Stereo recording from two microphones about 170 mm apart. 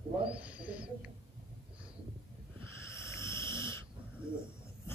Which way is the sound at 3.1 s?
15° left (ahead or behind).